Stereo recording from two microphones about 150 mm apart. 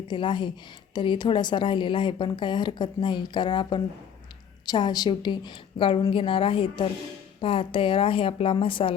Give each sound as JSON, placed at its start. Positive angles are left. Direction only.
{"t": 0.1, "sound": "speech", "side_deg": 30}